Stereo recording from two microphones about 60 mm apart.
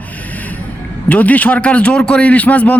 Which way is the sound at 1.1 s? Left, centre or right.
Left.